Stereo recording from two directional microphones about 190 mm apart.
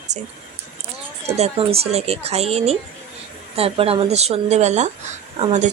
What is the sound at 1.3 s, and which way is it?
Speech, 30° right (ahead or behind).